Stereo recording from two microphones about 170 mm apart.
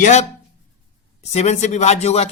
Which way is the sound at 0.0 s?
40° left (ahead or behind).